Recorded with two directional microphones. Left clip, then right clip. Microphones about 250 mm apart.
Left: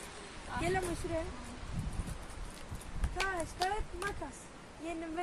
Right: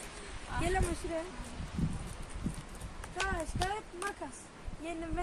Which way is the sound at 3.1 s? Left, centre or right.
Centre.